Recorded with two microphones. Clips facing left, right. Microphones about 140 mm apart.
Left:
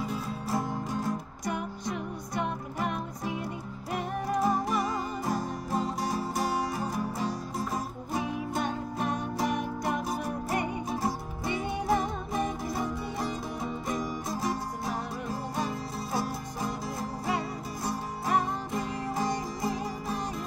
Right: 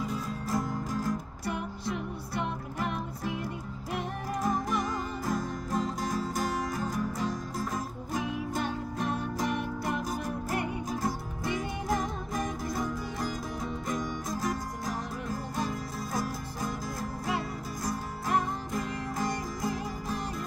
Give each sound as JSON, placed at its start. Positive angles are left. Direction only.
{"t": 0.5, "sound": "music", "side_deg": 25}
{"t": 2.4, "sound": "music", "side_deg": 5}
{"t": 6.7, "sound": "music", "side_deg": 25}
{"t": 8.1, "sound": "music", "side_deg": 0}
{"t": 15.7, "sound": "music", "side_deg": 30}
{"t": 16.6, "sound": "music", "side_deg": 0}
{"t": 19.6, "sound": "music", "side_deg": 0}